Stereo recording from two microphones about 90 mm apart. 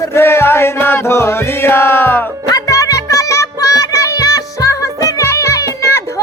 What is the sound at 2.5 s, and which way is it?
Music, 40° left (ahead or behind).